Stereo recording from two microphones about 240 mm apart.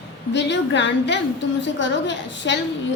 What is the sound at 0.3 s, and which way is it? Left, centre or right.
A woman's voice, left.